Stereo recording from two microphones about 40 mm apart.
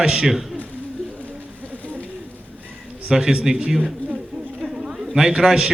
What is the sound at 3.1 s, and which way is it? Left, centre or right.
Speech, right.